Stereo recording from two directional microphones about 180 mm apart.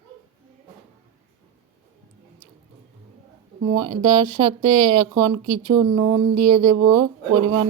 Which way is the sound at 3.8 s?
25° right (ahead or behind).